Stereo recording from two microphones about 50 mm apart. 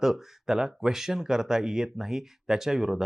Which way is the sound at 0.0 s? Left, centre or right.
Centre.